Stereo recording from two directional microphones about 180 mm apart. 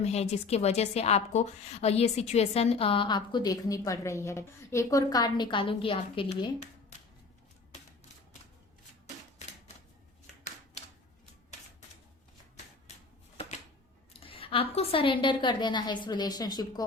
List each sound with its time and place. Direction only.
0.0 s a woman's voice: 35° left (ahead or behind)
9.4 s typewriter: 40° left (ahead or behind)
13.3 s a sound: 35° left (ahead or behind)
14.3 s a woman's voice: 30° left (ahead or behind)